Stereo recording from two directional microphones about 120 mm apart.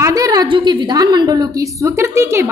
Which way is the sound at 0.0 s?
30° right (ahead or behind).